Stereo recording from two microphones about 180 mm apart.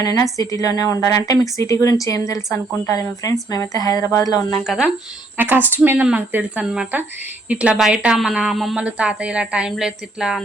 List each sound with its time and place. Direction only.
0.0 s a woman's voice: 20° left (ahead or behind)
4.6 s speech: centre (ahead or behind)